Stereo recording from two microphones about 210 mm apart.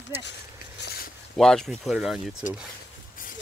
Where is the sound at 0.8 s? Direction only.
50° left (ahead or behind).